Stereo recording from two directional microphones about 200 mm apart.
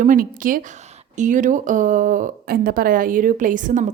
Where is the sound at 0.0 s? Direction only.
40° right (ahead or behind).